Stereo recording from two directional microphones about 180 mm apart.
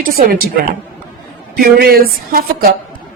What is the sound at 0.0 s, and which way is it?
Speech, 55° right (ahead or behind).